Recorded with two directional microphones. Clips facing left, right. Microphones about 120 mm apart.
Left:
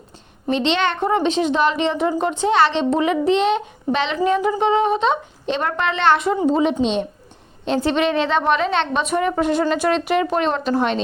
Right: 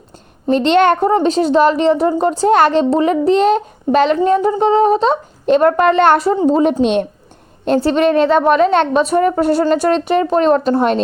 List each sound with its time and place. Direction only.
0.5 s speech: 45° right (ahead or behind)
4.2 s speech: 30° right (ahead or behind); by 7.1 s 55° right (ahead or behind)
7.8 s speech: 40° right (ahead or behind)